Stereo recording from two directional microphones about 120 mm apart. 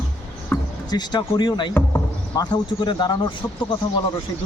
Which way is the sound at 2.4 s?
35° left (ahead or behind).